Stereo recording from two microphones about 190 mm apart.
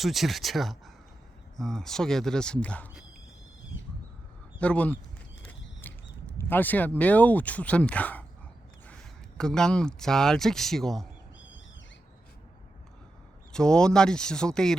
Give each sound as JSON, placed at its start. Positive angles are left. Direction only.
{"t": 0.0, "sound": "speech", "side_deg": 0}
{"t": 4.6, "sound": "speech", "side_deg": 5}
{"t": 5.4, "sound": "a sound", "side_deg": 10}
{"t": 9.4, "sound": "speech", "side_deg": 5}
{"t": 11.3, "sound": "bird", "side_deg": 80}
{"t": 13.5, "sound": "speech", "side_deg": 5}